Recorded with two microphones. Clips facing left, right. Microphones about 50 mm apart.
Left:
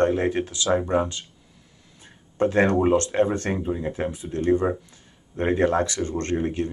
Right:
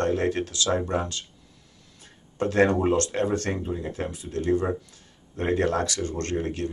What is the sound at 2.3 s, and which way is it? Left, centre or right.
Speech, left.